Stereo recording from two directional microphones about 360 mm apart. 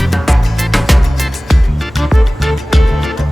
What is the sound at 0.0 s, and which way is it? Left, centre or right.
Music, centre.